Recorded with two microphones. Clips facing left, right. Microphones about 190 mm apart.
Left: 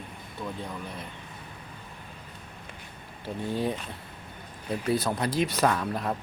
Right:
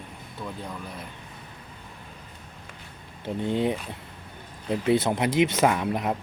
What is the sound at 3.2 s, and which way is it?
Speech, 20° right (ahead or behind).